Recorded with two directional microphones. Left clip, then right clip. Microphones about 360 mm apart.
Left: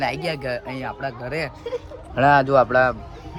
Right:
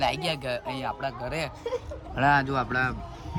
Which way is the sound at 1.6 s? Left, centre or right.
Right.